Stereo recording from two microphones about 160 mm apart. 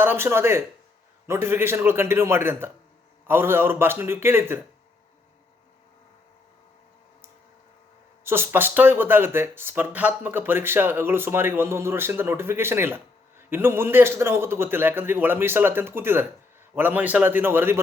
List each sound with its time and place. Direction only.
0.0 s speech: 15° right (ahead or behind)
8.2 s speech: 15° right (ahead or behind)